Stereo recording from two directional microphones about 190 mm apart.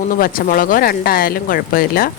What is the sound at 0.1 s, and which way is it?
Speech, 50° left (ahead or behind).